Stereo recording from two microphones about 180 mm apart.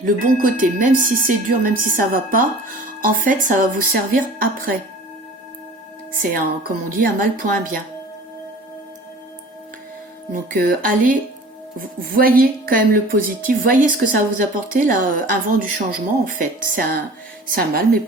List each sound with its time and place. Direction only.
0.0 s speech: 45° right (ahead or behind)
6.1 s speech: 55° right (ahead or behind)
10.3 s speech: 50° right (ahead or behind)